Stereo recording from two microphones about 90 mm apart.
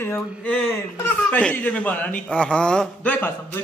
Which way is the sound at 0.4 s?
20° left (ahead or behind).